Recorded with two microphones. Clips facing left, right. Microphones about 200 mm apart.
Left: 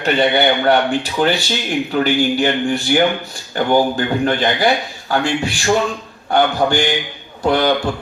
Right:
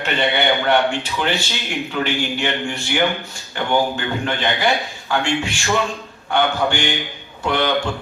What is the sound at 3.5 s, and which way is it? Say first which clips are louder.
A man's voice: left 5 dB; 40° left (ahead or behind).